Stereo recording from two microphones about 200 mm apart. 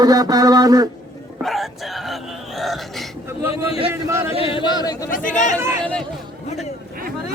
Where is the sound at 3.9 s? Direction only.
10° right (ahead or behind).